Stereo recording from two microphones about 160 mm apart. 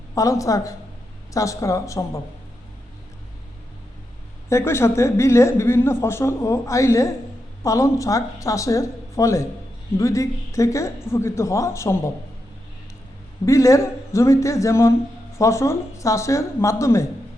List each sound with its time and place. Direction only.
0.1 s speech: 20° left (ahead or behind)
4.4 s speech: 15° left (ahead or behind)
13.4 s speech: 20° left (ahead or behind)